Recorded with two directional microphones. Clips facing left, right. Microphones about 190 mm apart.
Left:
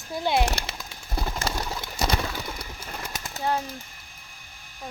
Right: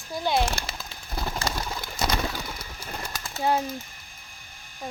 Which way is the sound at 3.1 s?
20° left (ahead or behind).